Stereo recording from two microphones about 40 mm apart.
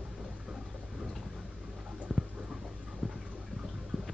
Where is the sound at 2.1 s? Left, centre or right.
Centre.